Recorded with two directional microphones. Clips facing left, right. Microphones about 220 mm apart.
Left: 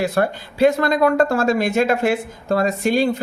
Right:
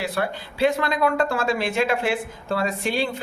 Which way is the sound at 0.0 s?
45° left (ahead or behind).